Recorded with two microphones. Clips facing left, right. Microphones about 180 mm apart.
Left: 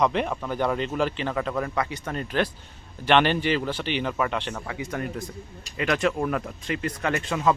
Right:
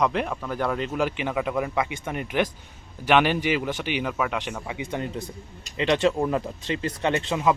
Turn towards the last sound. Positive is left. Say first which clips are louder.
# right 2 dB
turn(degrees=-25)  # may be behind; listen again after turning